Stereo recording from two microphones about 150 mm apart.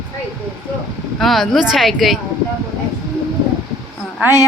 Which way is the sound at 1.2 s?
Centre (ahead or behind).